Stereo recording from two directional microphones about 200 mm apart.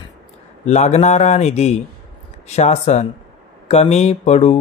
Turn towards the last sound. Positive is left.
turn(degrees=35)  # may be behind; listen again after turning